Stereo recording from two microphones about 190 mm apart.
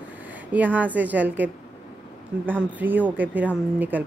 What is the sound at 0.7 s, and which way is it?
Speech, 10° right (ahead or behind).